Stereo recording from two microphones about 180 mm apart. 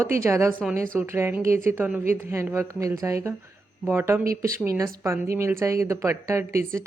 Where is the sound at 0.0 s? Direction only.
15° right (ahead or behind).